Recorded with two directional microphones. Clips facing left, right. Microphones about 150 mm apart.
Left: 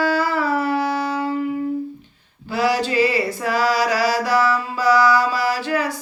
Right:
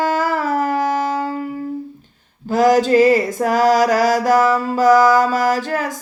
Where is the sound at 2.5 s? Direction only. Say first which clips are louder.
Right 7 dB; 45° right (ahead or behind).